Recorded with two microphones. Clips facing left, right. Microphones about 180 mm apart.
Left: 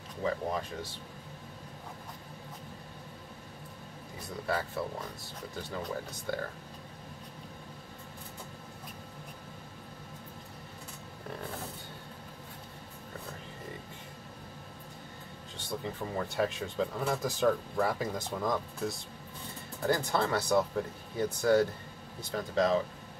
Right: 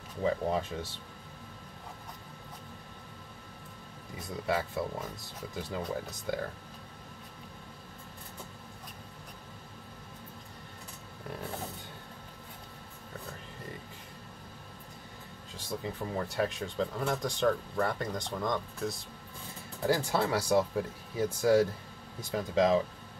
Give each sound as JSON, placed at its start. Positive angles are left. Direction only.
{"t": 0.2, "sound": "speech", "side_deg": -25}
{"t": 4.5, "sound": "speech", "side_deg": -10}
{"t": 5.8, "sound": "speech", "side_deg": 0}
{"t": 15.5, "sound": "speech", "side_deg": 0}